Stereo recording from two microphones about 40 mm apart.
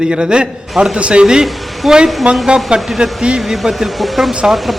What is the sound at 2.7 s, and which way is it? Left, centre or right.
Speech, right.